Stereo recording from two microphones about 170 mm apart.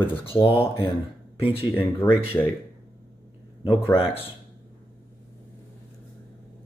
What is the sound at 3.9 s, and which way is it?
Speech, 35° left (ahead or behind).